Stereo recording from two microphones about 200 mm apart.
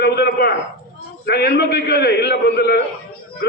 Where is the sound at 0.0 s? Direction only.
55° left (ahead or behind).